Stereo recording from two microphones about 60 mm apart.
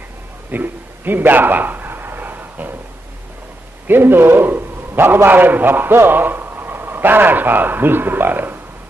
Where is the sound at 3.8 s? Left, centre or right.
Right.